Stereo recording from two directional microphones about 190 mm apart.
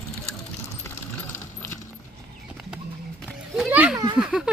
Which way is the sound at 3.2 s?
5° right (ahead or behind).